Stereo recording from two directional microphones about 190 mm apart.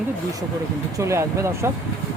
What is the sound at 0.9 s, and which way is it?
Speech, 15° right (ahead or behind).